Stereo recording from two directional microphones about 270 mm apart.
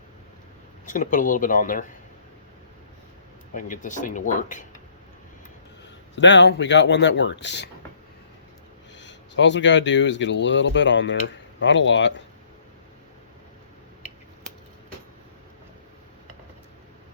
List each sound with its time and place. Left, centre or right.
0.9 s speech: left
3.5 s speech: left
6.1 s speech: left
9.0 s speech: left